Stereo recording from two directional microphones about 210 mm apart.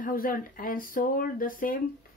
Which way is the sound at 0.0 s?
40° left (ahead or behind).